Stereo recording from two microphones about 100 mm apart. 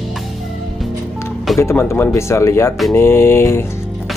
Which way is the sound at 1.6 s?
25° left (ahead or behind).